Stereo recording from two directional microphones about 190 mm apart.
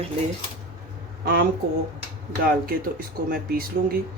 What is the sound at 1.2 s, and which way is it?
Speech, 55° right (ahead or behind).